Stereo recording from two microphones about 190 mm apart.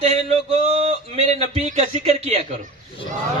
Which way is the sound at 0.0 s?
35° right (ahead or behind).